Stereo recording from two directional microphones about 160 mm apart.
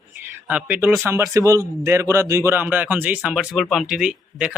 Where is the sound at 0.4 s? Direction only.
10° right (ahead or behind).